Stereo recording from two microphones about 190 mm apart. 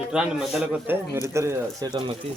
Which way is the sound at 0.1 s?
5° right (ahead or behind).